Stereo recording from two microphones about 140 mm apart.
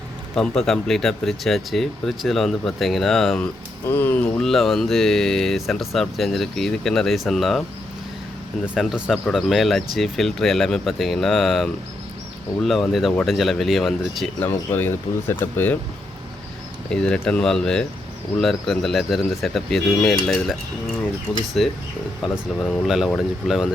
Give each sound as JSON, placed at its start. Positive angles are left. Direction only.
{"t": 0.3, "sound": "speech", "side_deg": 5}
{"t": 3.8, "sound": "speech", "side_deg": 15}
{"t": 4.4, "sound": "speech", "side_deg": 0}
{"t": 8.7, "sound": "speech", "side_deg": -5}
{"t": 14.7, "sound": "speech", "side_deg": 15}
{"t": 16.9, "sound": "speech", "side_deg": 5}